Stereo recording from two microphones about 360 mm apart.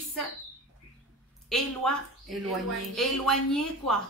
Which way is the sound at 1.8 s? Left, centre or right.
Centre.